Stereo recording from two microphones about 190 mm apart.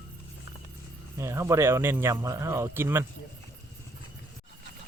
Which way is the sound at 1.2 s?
15° right (ahead or behind).